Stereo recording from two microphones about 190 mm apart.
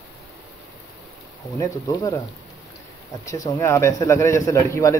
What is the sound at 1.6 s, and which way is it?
Speech, 20° left (ahead or behind).